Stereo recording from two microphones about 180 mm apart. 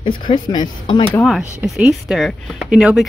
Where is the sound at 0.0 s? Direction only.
25° left (ahead or behind).